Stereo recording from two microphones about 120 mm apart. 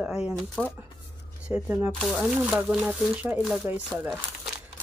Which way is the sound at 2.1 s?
5° right (ahead or behind).